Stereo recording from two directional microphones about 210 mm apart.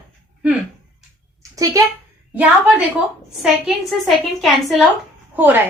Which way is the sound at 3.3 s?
Centre (ahead or behind).